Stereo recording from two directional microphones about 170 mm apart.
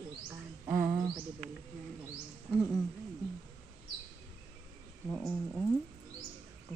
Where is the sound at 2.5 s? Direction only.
10° right (ahead or behind).